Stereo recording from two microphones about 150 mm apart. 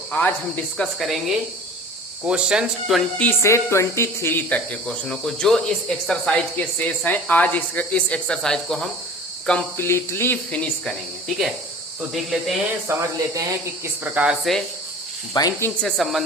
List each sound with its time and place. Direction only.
0.1 s a woman's voice: 10° left (ahead or behind)
12.1 s a woman's voice: centre (ahead or behind)
12.9 s speech: 20° right (ahead or behind)
13.8 s speech: 10° right (ahead or behind)
15.3 s speech: 25° left (ahead or behind)
15.8 s a woman's voice: centre (ahead or behind)